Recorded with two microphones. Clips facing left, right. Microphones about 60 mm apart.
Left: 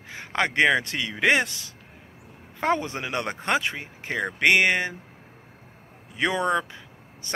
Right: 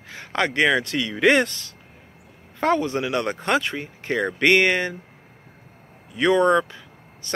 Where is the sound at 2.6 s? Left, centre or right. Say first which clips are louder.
Right 4 dB; left.